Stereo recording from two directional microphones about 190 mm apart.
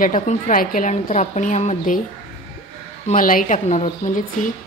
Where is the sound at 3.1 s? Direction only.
45° left (ahead or behind).